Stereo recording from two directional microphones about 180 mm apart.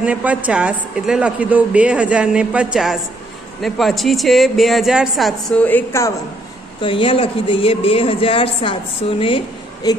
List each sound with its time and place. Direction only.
0.0 s a woman's voice: 5° right (ahead or behind)
5.7 s a woman's voice: 15° left (ahead or behind)
6.8 s a woman's voice: 30° left (ahead or behind)
9.8 s speech: 20° left (ahead or behind)